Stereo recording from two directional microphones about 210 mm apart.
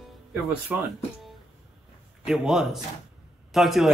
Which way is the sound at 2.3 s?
Centre (ahead or behind).